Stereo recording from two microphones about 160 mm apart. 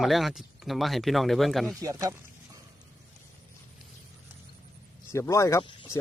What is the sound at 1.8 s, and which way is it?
Speech, 20° right (ahead or behind).